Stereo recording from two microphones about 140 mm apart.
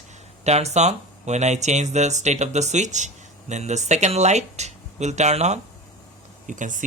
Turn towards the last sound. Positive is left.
turn(degrees=-65)  # may be behind; listen again after turning